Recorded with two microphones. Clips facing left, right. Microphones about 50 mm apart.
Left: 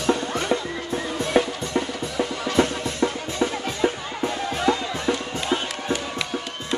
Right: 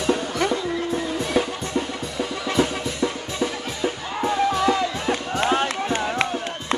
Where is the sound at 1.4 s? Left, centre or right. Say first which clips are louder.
Left 2 dB; left.